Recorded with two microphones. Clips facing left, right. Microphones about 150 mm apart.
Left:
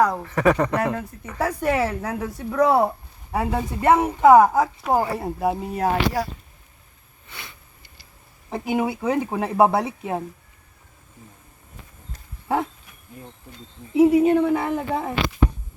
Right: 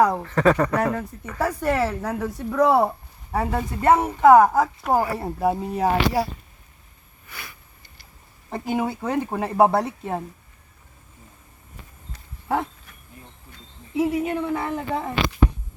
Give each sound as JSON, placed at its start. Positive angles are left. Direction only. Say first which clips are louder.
{"t": 0.0, "sound": "speech", "louder": "right 1 dB", "side_deg": 0}
{"t": 0.3, "sound": "speech", "louder": "even", "side_deg": 15}
{"t": 7.3, "sound": "sniff", "louder": "even", "side_deg": 25}
{"t": 8.4, "sound": "speech", "louder": "left 1 dB", "side_deg": 10}
{"t": 13.9, "sound": "speech", "louder": "left 7 dB", "side_deg": 25}